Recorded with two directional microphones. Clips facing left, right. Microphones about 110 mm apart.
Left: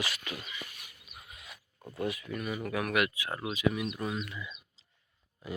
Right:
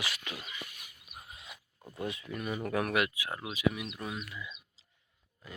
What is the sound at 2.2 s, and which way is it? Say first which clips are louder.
Speech: even; 25° right (ahead or behind).